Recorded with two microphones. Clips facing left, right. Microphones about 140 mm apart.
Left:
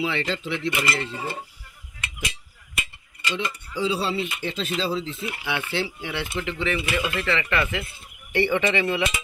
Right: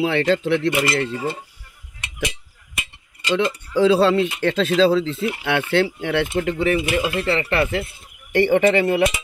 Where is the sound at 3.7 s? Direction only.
90° right; by 6.8 s 45° right (ahead or behind).